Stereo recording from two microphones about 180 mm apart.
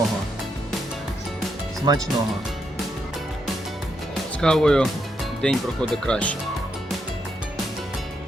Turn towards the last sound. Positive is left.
turn(degrees=5)  # may be behind; listen again after turning